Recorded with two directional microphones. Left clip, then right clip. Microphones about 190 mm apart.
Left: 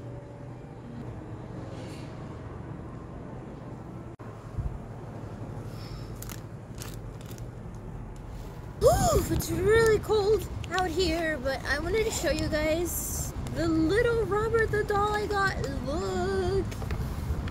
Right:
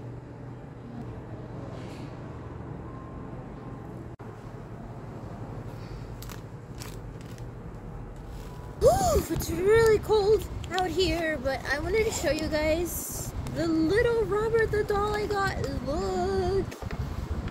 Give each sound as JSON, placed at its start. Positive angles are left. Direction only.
{"t": 9.2, "sound": "speech", "side_deg": 15}